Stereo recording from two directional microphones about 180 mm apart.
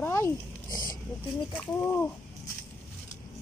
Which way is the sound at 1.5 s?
10° left (ahead or behind).